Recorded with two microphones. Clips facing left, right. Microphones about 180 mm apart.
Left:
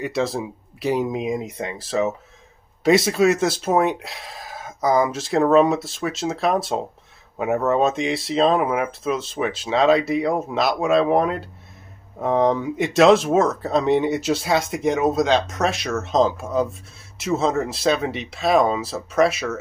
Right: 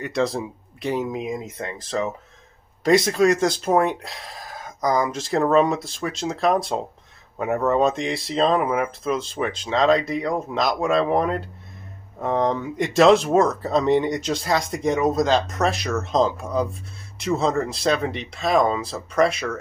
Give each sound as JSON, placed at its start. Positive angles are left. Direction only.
{"t": 0.0, "sound": "speech", "side_deg": 5}
{"t": 0.8, "sound": "speech", "side_deg": 15}